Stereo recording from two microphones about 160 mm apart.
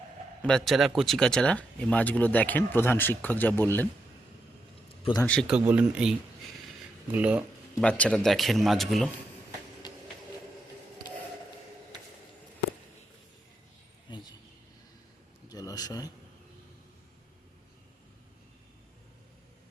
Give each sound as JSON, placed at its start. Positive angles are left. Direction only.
{"t": 0.4, "sound": "speech", "side_deg": 5}
{"t": 5.2, "sound": "speech", "side_deg": 5}
{"t": 5.6, "sound": "speech", "side_deg": -10}
{"t": 7.8, "sound": "speech", "side_deg": 10}
{"t": 14.1, "sound": "a sound", "side_deg": 30}
{"t": 15.4, "sound": "a sound", "side_deg": 25}